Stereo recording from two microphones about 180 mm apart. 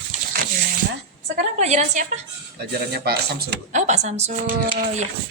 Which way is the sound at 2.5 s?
60° right (ahead or behind).